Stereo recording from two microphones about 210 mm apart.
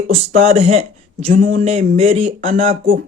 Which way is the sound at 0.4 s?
30° right (ahead or behind).